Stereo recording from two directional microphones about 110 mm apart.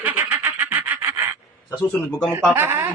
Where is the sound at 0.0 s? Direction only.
15° right (ahead or behind).